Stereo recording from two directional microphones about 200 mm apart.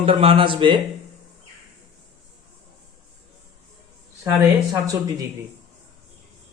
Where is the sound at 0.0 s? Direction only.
30° right (ahead or behind).